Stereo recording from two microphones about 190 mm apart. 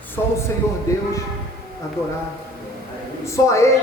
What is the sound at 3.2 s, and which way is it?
Speech, 15° left (ahead or behind).